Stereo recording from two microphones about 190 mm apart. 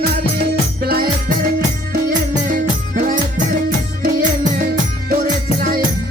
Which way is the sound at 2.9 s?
45° right (ahead or behind).